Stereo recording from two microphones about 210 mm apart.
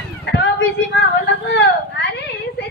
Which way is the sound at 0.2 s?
55° left (ahead or behind).